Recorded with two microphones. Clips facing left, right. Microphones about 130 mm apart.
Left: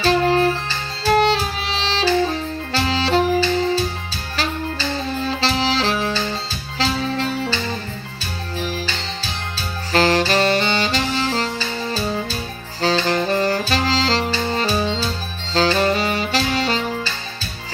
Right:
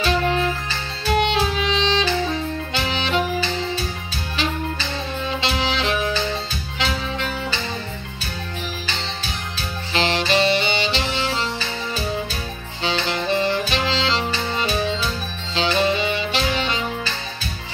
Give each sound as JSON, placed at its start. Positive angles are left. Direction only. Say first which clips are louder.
{"t": 0.0, "sound": "music", "louder": "left 4 dB", "side_deg": 35}
{"t": 2.7, "sound": "saxophone", "louder": "left 6 dB", "side_deg": 35}
{"t": 4.4, "sound": "saxophone", "louder": "left 1 dB", "side_deg": 35}
{"t": 6.8, "sound": "music", "louder": "left 4 dB", "side_deg": 35}
{"t": 9.9, "sound": "saxophone", "louder": "left 4 dB", "side_deg": 40}
{"t": 12.8, "sound": "saxophone", "louder": "left 5 dB", "side_deg": 40}